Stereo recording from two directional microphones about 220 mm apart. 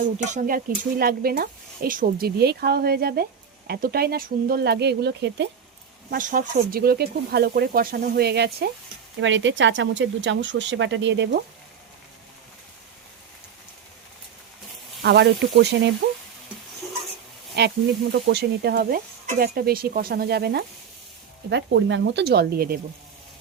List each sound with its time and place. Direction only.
0.3 s speech: 35° right (ahead or behind)
6.1 s speech: 40° right (ahead or behind)
9.2 s speech: 60° right (ahead or behind)
15.0 s speech: 50° right (ahead or behind)
17.6 s speech: 50° right (ahead or behind)